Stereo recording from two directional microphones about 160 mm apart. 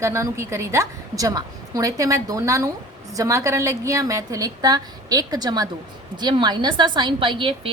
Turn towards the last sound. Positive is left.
turn(degrees=-30)  # may be behind; listen again after turning